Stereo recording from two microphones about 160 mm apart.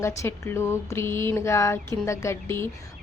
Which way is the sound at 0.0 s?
20° left (ahead or behind).